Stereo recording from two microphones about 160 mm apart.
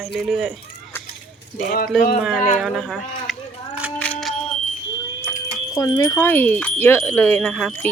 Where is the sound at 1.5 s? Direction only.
65° left (ahead or behind).